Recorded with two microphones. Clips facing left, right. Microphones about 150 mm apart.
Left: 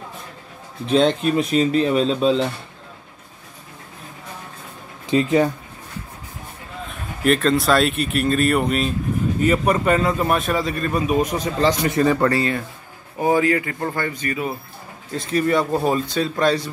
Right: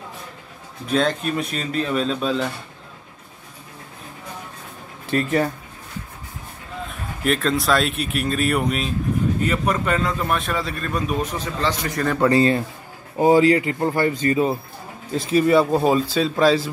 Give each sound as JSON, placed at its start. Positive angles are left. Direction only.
{"t": 0.8, "sound": "speech", "side_deg": 25}
{"t": 5.0, "sound": "speech", "side_deg": 15}
{"t": 7.2, "sound": "a man's voice", "side_deg": 0}
{"t": 12.3, "sound": "speech", "side_deg": -25}
{"t": 15.3, "sound": "speech", "side_deg": -15}
{"t": 16.1, "sound": "speech", "side_deg": -5}